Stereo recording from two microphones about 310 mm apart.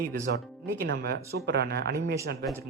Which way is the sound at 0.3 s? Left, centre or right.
Right.